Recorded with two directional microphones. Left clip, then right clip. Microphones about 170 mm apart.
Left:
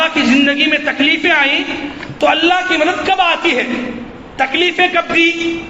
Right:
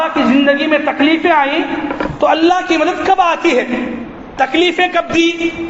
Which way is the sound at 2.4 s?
40° right (ahead or behind).